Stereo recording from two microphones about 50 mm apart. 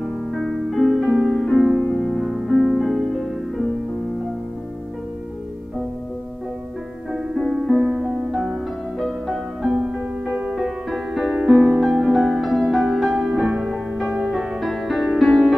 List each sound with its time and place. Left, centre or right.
0.0 s music: centre
7.5 s music: centre
11.5 s music: right
12.0 s music: centre